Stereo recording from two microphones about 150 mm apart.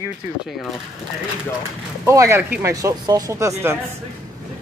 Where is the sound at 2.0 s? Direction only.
20° right (ahead or behind).